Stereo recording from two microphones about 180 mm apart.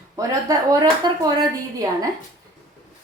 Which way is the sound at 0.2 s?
20° right (ahead or behind).